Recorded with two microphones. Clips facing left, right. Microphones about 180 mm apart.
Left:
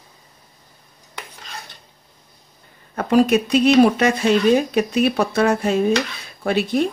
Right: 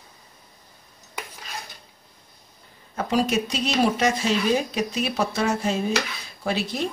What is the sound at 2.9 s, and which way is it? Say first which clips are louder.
Speech: left 7 dB; 60° left (ahead or behind).